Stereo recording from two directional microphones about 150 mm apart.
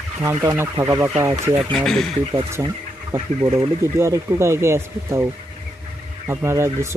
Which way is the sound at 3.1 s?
15° right (ahead or behind).